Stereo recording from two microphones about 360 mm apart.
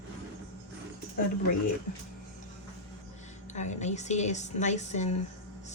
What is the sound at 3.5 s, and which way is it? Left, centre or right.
A woman's voice, centre.